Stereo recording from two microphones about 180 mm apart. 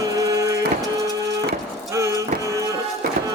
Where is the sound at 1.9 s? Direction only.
15° right (ahead or behind).